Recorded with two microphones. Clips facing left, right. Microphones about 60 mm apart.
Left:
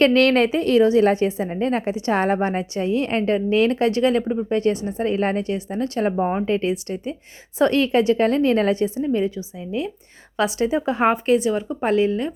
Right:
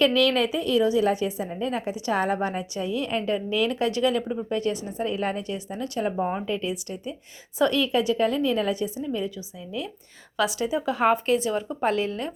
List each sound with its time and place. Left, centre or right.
0.0 s a woman's voice: left
6.1 s speech: left
6.5 s a woman's voice: left
9.0 s speech: left